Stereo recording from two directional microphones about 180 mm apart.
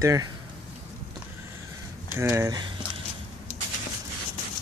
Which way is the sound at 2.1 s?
15° right (ahead or behind).